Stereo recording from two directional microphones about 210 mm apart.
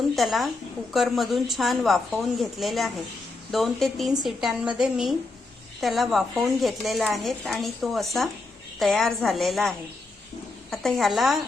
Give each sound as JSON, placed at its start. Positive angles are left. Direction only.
{"t": 0.2, "sound": "a woman's voice", "side_deg": 0}